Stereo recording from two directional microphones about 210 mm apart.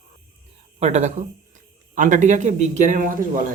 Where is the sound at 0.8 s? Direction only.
35° right (ahead or behind).